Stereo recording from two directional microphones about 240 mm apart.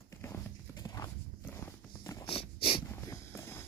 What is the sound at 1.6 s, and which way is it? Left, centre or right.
Walk, centre.